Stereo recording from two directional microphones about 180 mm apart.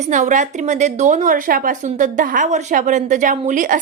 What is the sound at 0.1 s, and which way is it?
A woman's voice, 45° right (ahead or behind).